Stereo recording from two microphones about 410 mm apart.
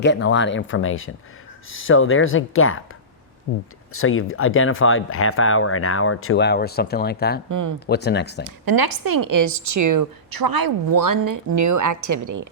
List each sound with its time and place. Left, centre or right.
0.0 s speech: left
3.9 s speech: left
7.5 s speech: right
7.9 s speech: left
8.4 s speech: right